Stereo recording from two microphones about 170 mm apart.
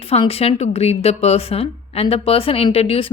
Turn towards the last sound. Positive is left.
turn(degrees=35)  # may be behind; listen again after turning